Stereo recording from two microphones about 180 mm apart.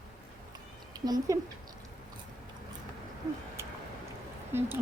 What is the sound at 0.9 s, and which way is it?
Speech, 20° right (ahead or behind).